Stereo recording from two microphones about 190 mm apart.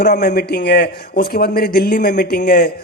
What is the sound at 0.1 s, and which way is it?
A man's voice, 40° left (ahead or behind).